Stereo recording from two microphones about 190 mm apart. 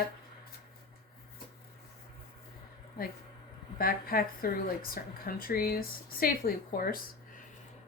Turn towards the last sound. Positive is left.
turn(degrees=50)  # may be behind; listen again after turning